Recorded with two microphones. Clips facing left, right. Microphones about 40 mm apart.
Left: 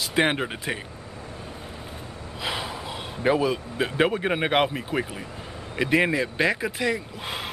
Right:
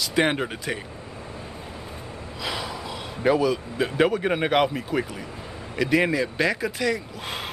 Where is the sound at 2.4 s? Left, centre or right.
Left.